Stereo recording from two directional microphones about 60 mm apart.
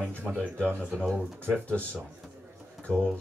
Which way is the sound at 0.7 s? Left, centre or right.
Centre.